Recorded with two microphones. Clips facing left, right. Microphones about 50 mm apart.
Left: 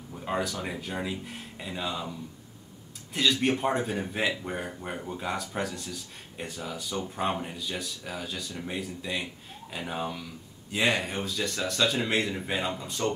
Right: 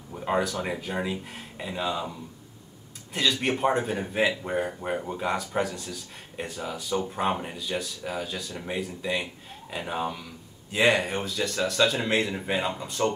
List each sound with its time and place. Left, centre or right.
0.1 s a sound: centre
1.0 s a man's voice: centre
3.1 s a man's voice: centre